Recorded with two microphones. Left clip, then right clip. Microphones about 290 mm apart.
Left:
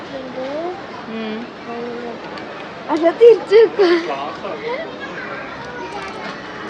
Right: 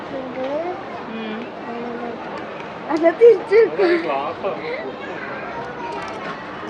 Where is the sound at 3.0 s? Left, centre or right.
Centre.